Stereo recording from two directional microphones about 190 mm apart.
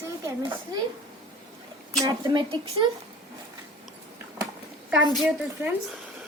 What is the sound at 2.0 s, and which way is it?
Speech, 25° right (ahead or behind).